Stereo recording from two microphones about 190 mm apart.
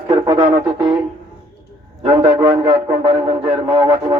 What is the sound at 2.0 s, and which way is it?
A man's voice, 25° right (ahead or behind).